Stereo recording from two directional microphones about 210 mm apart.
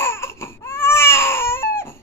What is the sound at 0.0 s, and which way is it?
Baby cry, 10° left (ahead or behind).